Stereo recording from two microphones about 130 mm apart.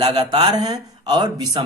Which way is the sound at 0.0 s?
35° right (ahead or behind).